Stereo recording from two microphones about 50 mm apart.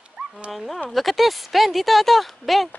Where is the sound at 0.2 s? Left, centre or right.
Right.